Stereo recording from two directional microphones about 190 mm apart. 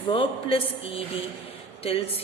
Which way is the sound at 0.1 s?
30° left (ahead or behind).